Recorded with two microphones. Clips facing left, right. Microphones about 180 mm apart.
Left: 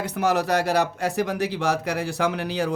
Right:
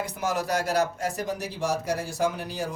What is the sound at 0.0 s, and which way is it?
Speech, 65° left (ahead or behind).